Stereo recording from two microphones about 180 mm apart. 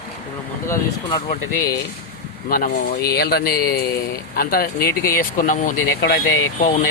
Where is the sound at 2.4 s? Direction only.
50° left (ahead or behind).